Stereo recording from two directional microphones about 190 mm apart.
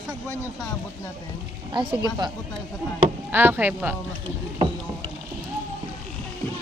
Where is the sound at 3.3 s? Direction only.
10° right (ahead or behind).